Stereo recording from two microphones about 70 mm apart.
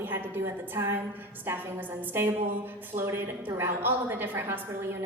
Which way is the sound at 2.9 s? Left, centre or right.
Right.